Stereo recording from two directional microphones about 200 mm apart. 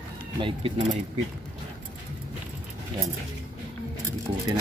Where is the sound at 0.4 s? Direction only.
25° right (ahead or behind).